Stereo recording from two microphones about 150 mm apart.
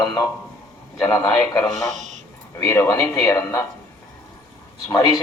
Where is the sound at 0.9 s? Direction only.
20° left (ahead or behind).